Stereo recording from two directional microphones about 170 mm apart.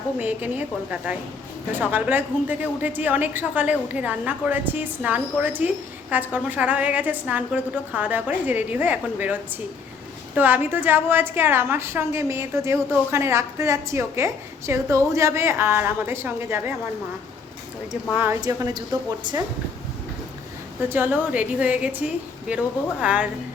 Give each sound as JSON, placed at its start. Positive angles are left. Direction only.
{"t": 0.2, "sound": "a woman's voice", "side_deg": -10}
{"t": 18.1, "sound": "a woman's voice", "side_deg": -10}
{"t": 18.3, "sound": "a woman's voice", "side_deg": -20}
{"t": 20.9, "sound": "a woman's voice", "side_deg": -10}